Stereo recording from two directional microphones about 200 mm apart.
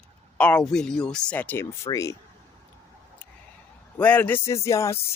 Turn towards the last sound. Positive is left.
turn(degrees=15)  # may be behind; listen again after turning